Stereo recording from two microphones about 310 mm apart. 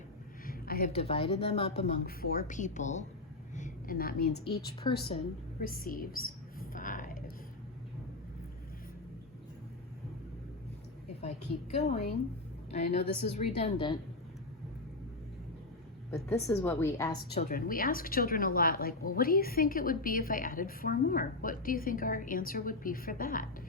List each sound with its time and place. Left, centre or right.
0.4 s a woman's voice: left
3.5 s a sound: left
4.6 s a woman's voice: centre
5.5 s a sound: left
11.2 s a woman's voice: left
16.1 s a woman's voice: centre
17.3 s a woman's voice: left